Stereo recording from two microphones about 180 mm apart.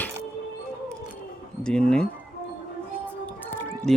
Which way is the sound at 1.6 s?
5° left (ahead or behind).